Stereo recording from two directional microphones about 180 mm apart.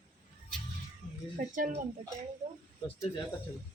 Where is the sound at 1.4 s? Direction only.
45° right (ahead or behind).